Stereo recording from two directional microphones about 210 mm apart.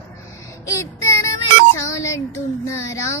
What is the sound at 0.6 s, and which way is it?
Child singing, 15° left (ahead or behind).